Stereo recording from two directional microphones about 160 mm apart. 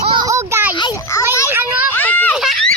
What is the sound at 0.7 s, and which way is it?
Speech, 25° left (ahead or behind).